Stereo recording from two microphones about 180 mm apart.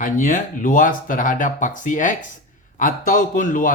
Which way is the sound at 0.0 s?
45° left (ahead or behind).